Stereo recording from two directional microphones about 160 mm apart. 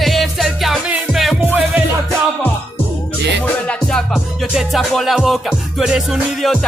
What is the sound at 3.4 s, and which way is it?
Music, 5° left (ahead or behind).